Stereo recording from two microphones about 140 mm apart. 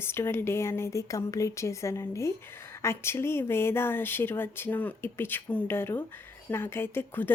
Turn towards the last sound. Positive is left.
turn(degrees=15)  # may be behind; listen again after turning